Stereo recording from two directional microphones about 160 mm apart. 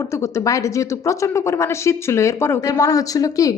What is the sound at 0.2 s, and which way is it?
Speech, 20° left (ahead or behind).